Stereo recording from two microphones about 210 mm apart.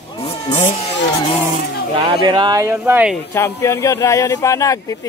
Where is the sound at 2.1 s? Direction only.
20° right (ahead or behind).